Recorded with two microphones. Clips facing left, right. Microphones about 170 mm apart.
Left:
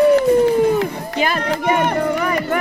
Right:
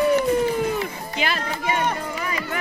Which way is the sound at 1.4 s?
70° left (ahead or behind).